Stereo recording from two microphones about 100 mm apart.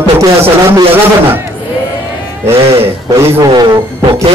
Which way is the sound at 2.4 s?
25° right (ahead or behind).